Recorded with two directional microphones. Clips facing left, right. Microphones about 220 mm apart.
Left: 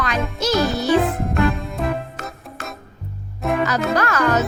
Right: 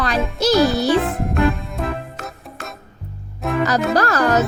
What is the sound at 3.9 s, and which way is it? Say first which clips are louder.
Speech: right 2 dB; 35° right (ahead or behind).